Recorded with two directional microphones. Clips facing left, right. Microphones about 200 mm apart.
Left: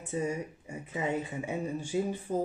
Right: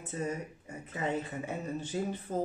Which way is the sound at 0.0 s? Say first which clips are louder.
Left 3 dB; 15° left (ahead or behind).